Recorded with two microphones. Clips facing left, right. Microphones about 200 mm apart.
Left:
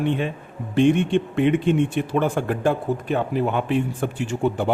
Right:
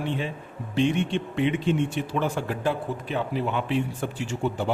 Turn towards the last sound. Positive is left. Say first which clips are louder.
# left 5 dB
turn(degrees=55)  # may be behind; listen again after turning